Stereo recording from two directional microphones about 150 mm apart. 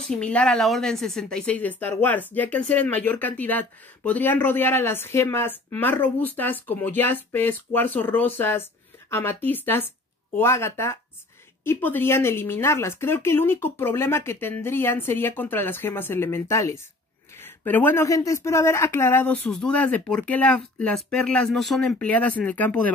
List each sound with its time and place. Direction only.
0.2 s a woman's voice: 5° left (ahead or behind)